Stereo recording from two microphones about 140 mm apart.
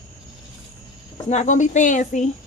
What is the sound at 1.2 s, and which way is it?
Speech, 55° left (ahead or behind).